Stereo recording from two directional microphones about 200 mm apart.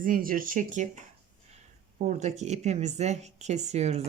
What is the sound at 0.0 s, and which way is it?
Speech, 45° right (ahead or behind).